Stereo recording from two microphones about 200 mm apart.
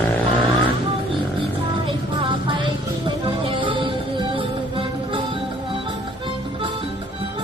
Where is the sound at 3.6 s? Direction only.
25° right (ahead or behind).